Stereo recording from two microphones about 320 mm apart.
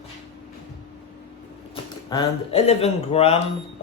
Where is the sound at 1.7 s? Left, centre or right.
Centre.